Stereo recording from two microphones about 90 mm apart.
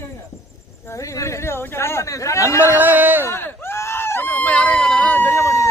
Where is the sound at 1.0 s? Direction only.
35° left (ahead or behind).